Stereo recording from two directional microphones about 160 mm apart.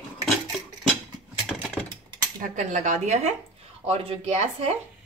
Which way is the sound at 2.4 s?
50° right (ahead or behind).